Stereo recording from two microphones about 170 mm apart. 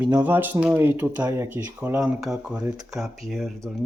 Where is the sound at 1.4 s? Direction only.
10° right (ahead or behind).